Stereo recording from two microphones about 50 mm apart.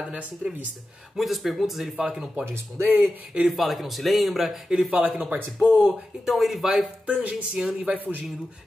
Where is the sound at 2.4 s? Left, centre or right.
Right.